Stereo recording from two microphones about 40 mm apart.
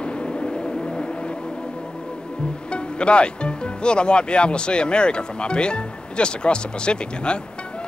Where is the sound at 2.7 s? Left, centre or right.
Left.